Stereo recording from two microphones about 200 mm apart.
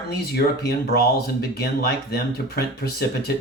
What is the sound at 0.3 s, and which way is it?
Speech, 50° left (ahead or behind).